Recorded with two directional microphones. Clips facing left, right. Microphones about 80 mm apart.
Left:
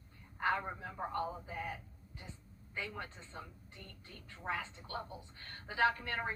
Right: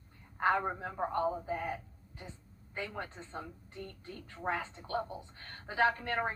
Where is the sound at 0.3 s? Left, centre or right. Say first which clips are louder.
Right 5 dB; right.